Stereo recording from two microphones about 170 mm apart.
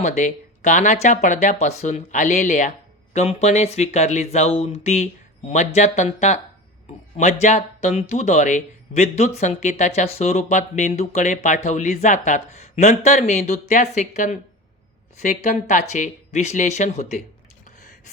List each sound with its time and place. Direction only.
0.2 s speech: 45° left (ahead or behind)